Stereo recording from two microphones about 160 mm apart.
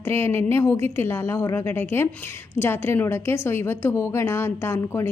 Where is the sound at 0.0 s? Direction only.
15° left (ahead or behind).